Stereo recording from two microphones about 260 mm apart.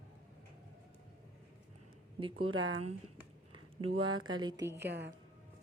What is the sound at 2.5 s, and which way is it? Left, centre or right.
Speech, right.